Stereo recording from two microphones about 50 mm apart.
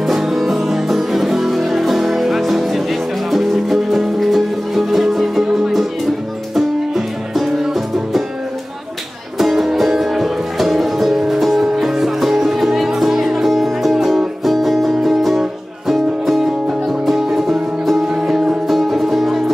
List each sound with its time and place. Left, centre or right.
0.0 s music: centre
9.4 s music: centre
18.7 s music: centre